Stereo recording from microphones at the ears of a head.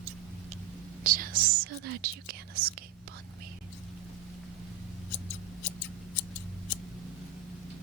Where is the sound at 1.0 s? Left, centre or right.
Right.